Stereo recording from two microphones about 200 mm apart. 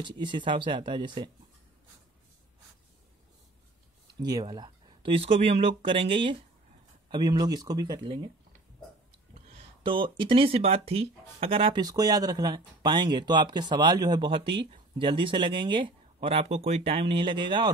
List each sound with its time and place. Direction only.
0.0 s speech: 25° right (ahead or behind)
4.2 s speech: 20° right (ahead or behind)
9.3 s speech: 25° right (ahead or behind)